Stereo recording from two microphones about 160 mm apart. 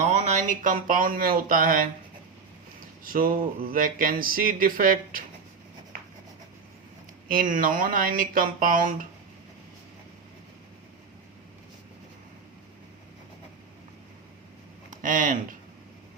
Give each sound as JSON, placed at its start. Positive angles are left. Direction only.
{"t": 0.0, "sound": "speech", "side_deg": -45}
{"t": 7.3, "sound": "speech", "side_deg": -60}
{"t": 14.8, "sound": "a sound", "side_deg": -55}